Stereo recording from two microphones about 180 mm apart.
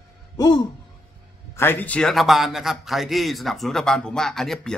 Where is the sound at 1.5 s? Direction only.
10° left (ahead or behind).